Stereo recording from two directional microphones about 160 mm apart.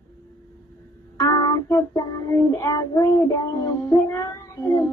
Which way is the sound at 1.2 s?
25° left (ahead or behind).